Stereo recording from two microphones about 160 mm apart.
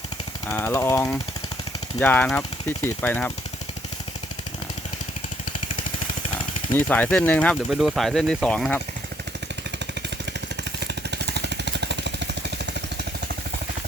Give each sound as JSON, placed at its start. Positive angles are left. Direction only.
{"t": 0.5, "sound": "speech", "side_deg": 15}
{"t": 6.7, "sound": "speech", "side_deg": 10}
{"t": 10.6, "sound": "vehicle", "side_deg": -90}